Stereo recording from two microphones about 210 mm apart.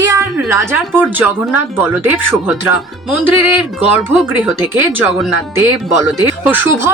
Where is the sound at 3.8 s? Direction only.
10° right (ahead or behind).